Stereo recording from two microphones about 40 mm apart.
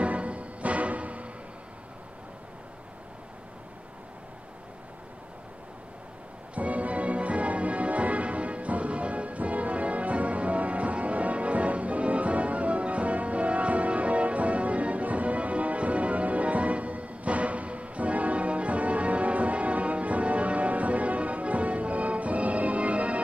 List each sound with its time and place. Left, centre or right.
0.0 s music: right
6.5 s music: right